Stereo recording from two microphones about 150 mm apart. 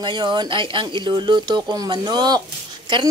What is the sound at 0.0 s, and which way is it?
A woman's voice, 30° right (ahead or behind).